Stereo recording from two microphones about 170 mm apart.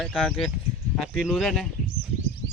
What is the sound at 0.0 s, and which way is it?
Speech, centre (ahead or behind).